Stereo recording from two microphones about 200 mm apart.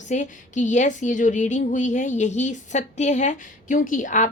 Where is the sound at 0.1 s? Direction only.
40° left (ahead or behind).